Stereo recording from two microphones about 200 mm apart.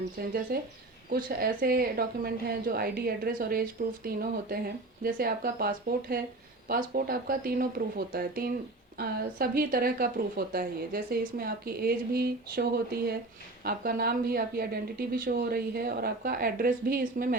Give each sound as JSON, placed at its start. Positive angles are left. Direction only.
{"t": 0.2, "sound": "a woman's voice", "side_deg": -50}